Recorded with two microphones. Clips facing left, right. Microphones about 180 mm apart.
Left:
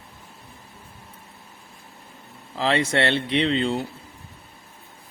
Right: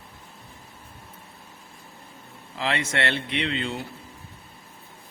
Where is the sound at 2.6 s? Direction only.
30° left (ahead or behind).